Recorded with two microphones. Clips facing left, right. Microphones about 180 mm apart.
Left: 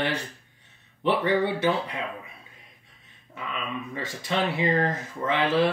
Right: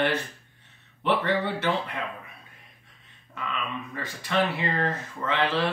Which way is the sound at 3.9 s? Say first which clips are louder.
Right 2 dB; 15° left (ahead or behind).